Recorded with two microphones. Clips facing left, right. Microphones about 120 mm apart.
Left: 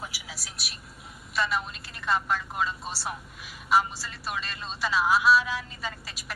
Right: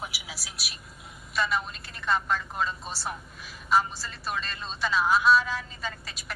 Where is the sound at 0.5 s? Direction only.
Centre (ahead or behind).